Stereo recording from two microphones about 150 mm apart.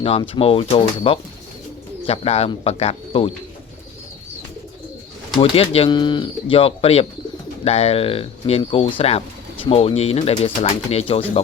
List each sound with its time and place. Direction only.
0.0 s speech: 40° left (ahead or behind)
5.4 s speech: 40° left (ahead or behind)